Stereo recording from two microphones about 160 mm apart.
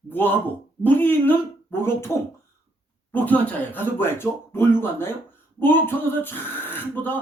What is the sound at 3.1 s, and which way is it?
Speech, 10° left (ahead or behind).